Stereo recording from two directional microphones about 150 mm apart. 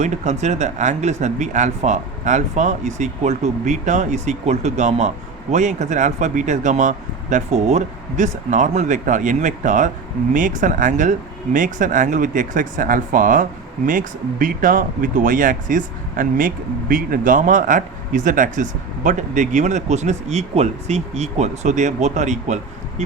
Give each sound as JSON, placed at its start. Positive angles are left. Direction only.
{"t": 0.0, "sound": "speech", "side_deg": -50}